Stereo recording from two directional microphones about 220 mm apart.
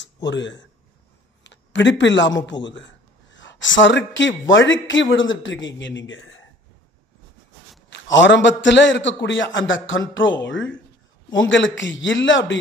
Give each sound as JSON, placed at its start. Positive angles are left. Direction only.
{"t": 0.0, "sound": "speech", "side_deg": 55}
{"t": 1.4, "sound": "a sound", "side_deg": 55}
{"t": 2.6, "sound": "speech", "side_deg": 55}
{"t": 7.9, "sound": "speech", "side_deg": 55}